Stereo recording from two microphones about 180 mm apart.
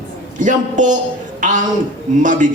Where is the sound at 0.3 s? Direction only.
45° right (ahead or behind).